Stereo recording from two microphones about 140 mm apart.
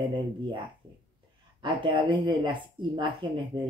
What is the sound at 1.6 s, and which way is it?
Speech, 35° right (ahead or behind).